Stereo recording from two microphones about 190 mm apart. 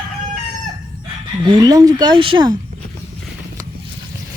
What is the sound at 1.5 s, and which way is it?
Speech, 20° right (ahead or behind).